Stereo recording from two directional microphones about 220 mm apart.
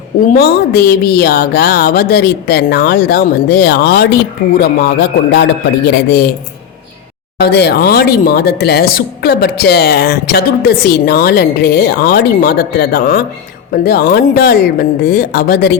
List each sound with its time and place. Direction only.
0.3 s a woman's voice: 45° left (ahead or behind)
7.3 s a woman's voice: 50° left (ahead or behind)